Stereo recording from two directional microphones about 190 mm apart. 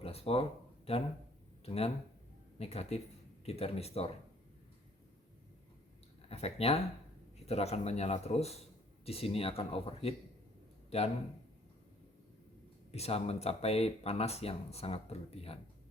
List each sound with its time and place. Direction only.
0.0 s speech: 30° left (ahead or behind)
1.6 s speech: 30° left (ahead or behind)
6.2 s speech: 30° left (ahead or behind)
12.9 s speech: 30° left (ahead or behind)